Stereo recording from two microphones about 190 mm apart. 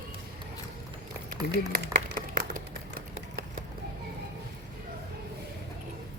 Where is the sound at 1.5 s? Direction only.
55° right (ahead or behind).